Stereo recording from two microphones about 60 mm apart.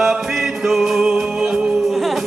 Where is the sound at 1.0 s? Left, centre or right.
Centre.